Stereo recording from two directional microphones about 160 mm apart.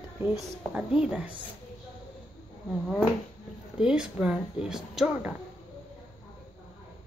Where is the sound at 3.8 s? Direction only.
5° right (ahead or behind).